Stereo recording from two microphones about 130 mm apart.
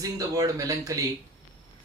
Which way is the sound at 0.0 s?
25° right (ahead or behind).